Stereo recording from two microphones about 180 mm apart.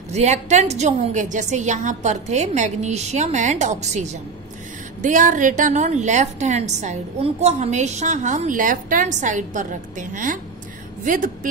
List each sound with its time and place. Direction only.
0.1 s a woman's voice: 40° right (ahead or behind)